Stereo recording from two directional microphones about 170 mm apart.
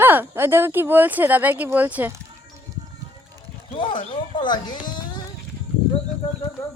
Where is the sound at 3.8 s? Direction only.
30° left (ahead or behind).